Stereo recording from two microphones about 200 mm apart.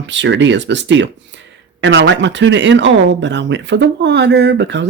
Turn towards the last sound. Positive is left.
turn(degrees=-60)  # may be behind; listen again after turning